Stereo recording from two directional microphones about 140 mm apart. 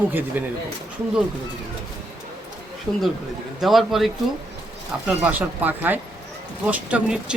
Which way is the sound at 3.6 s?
Centre (ahead or behind).